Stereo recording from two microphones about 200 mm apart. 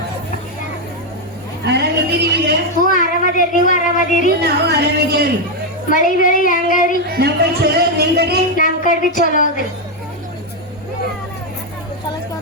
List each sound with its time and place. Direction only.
1.6 s a sound: 55° right (ahead or behind)
2.9 s speech: 40° left (ahead or behind)
4.4 s speech: 55° right (ahead or behind)
5.9 s speech: 40° left (ahead or behind)
7.1 s speech: 50° right (ahead or behind)
8.5 s a woman's voice: 40° left (ahead or behind)